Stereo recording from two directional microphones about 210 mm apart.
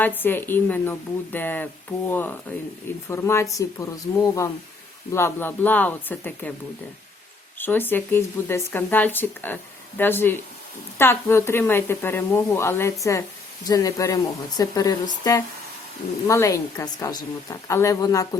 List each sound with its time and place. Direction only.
0.0 s speech: 10° left (ahead or behind)
7.6 s speech: 10° left (ahead or behind)